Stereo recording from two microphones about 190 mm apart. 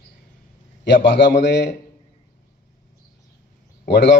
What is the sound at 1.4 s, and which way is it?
Speech, 65° left (ahead or behind).